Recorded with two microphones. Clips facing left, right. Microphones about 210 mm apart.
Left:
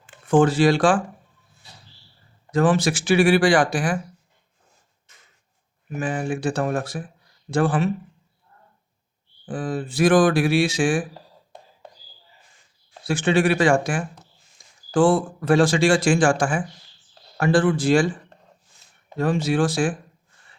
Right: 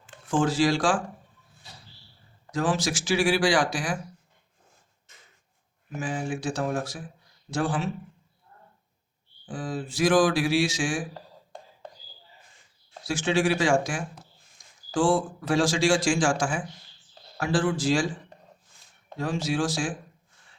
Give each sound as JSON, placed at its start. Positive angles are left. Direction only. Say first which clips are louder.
{"t": 0.0, "sound": "speech", "louder": "left 8 dB", "side_deg": 60}
{"t": 2.5, "sound": "speech", "louder": "left 7 dB", "side_deg": 60}
{"t": 6.0, "sound": "speech", "louder": "left 5 dB", "side_deg": 60}
{"t": 9.5, "sound": "speech", "louder": "left 5 dB", "side_deg": 55}
{"t": 13.1, "sound": "speech", "louder": "left 5 dB", "side_deg": 60}
{"t": 19.1, "sound": "speech", "louder": "left 6 dB", "side_deg": 55}